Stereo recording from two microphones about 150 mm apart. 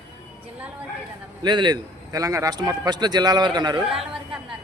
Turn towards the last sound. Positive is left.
turn(degrees=-5)  # may be behind; listen again after turning